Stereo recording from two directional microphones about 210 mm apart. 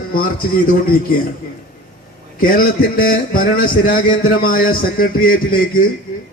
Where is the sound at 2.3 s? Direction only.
45° left (ahead or behind).